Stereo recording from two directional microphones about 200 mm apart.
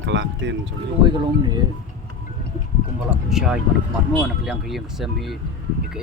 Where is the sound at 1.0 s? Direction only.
25° right (ahead or behind).